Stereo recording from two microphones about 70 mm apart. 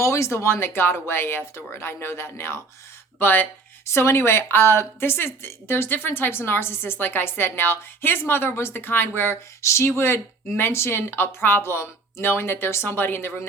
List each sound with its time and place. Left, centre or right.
0.0 s speech: left
3.2 s speech: left
3.8 s speech: left